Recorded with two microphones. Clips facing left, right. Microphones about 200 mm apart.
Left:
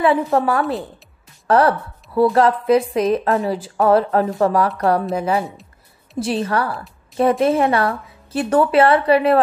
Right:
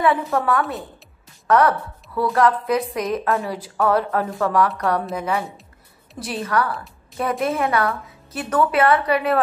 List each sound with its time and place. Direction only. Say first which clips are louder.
0.0 s a woman's voice: left 4 dB; 25° left (ahead or behind)